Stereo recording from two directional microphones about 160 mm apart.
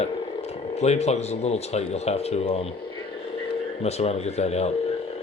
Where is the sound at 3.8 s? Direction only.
40° left (ahead or behind).